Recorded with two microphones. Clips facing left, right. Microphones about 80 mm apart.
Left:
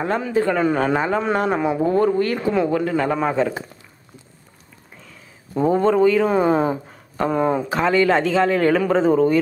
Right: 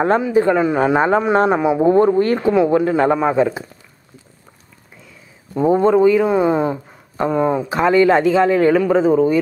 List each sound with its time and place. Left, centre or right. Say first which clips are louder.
0.2 s a man's voice: right 4 dB; centre
1.3 s speech: right 5 dB; right
1.6 s a man's voice: right 4 dB; centre
1.9 s speech: right 6 dB; right
3.2 s a man's voice: right 4 dB; centre
5.7 s a man's voice: right 4 dB; centre
6.3 s speech: right 2 dB; centre
7.7 s a man's voice: right 5 dB; right